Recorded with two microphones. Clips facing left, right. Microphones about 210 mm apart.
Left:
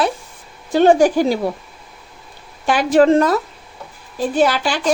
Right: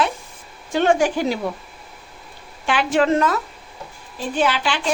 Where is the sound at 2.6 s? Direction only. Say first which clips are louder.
Left 6 dB; 40° left (ahead or behind).